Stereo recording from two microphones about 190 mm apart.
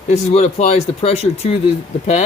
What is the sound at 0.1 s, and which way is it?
Speech, 35° left (ahead or behind).